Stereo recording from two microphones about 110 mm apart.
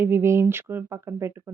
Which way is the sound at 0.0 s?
25° right (ahead or behind).